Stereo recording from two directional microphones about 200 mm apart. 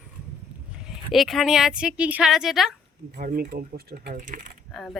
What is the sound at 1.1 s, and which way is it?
Speech, centre (ahead or behind).